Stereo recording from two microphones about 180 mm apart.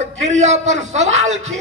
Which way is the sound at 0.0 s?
40° right (ahead or behind).